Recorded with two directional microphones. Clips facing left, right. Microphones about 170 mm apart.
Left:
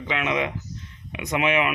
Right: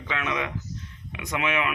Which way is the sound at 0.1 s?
20° left (ahead or behind).